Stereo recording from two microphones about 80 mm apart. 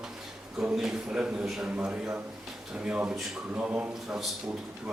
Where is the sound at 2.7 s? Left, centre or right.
Centre.